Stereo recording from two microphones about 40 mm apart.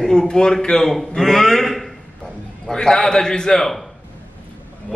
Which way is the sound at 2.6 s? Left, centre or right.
Centre.